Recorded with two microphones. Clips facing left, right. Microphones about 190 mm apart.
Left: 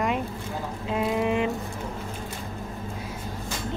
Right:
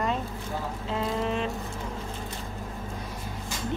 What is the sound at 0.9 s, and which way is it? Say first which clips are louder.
Speech: left 4 dB; 15° left (ahead or behind).